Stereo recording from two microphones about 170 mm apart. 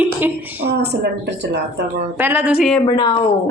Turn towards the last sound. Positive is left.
turn(degrees=25)  # may be behind; listen again after turning